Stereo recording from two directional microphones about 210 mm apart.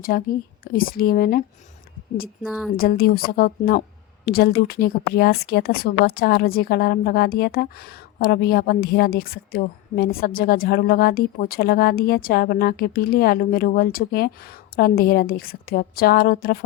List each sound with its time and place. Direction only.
0.0 s speech: 45° left (ahead or behind)
2.4 s a woman's voice: 5° right (ahead or behind)
2.7 s speech: 45° left (ahead or behind)